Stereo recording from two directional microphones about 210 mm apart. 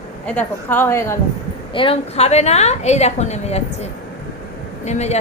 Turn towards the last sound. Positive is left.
turn(degrees=30)  # may be behind; listen again after turning